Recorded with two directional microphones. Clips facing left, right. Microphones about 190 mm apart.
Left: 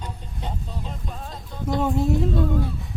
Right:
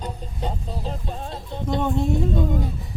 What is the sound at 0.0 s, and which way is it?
Music, 35° right (ahead or behind).